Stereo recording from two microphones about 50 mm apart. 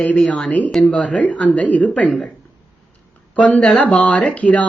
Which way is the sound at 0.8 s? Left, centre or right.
Left.